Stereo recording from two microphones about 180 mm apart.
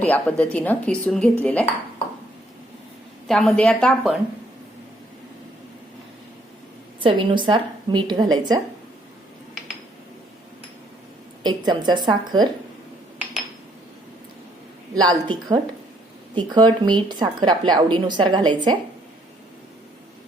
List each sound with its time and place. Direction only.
0.0 s speech: 10° left (ahead or behind)
3.2 s a woman's voice: 5° left (ahead or behind)
7.0 s a woman's voice: 25° right (ahead or behind)
11.4 s a woman's voice: 25° right (ahead or behind)
14.9 s a woman's voice: 25° right (ahead or behind)